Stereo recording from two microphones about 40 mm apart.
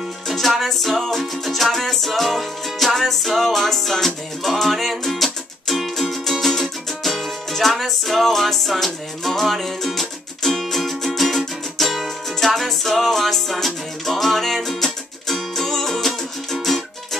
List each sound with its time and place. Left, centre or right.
0.3 s music: centre